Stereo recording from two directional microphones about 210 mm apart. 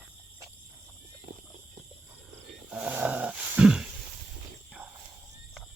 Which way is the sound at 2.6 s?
5° right (ahead or behind).